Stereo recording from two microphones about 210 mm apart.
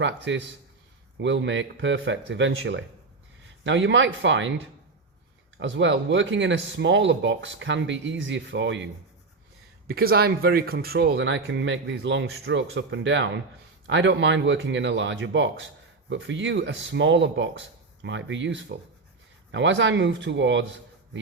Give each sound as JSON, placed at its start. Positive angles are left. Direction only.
{"t": 0.0, "sound": "speech", "side_deg": -60}
{"t": 5.5, "sound": "speech", "side_deg": -60}
{"t": 9.8, "sound": "speech", "side_deg": -45}